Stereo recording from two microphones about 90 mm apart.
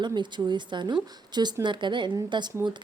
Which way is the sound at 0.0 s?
55° right (ahead or behind).